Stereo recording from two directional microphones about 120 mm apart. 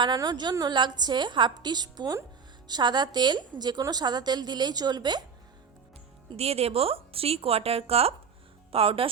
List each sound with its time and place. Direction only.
0.0 s a woman's voice: 35° right (ahead or behind)
6.3 s a woman's voice: 55° right (ahead or behind)